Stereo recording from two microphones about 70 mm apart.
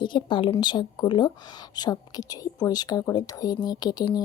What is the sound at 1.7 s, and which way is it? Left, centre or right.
A woman's voice, left.